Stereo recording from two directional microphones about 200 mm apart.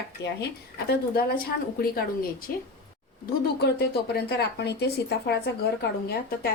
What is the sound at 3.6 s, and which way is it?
Speech, 55° left (ahead or behind).